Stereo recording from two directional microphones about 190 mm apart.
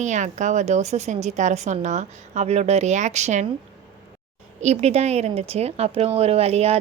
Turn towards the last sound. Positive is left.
turn(degrees=-30)  # may be behind; listen again after turning